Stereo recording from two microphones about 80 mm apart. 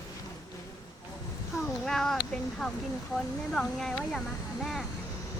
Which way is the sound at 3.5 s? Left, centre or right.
Centre.